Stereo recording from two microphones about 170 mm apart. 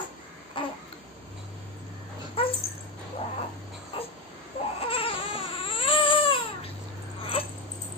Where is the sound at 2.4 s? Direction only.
35° left (ahead or behind).